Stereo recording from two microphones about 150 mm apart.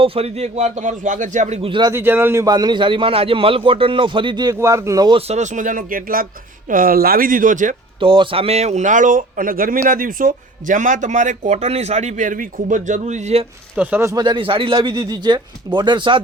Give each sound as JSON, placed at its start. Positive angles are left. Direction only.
{"t": 0.0, "sound": "speech", "side_deg": -40}
{"t": 1.9, "sound": "a man's voice", "side_deg": -15}
{"t": 5.1, "sound": "speech", "side_deg": -50}
{"t": 7.9, "sound": "speech", "side_deg": -35}
{"t": 13.7, "sound": "speech", "side_deg": -15}
{"t": 14.3, "sound": "a man's voice", "side_deg": -35}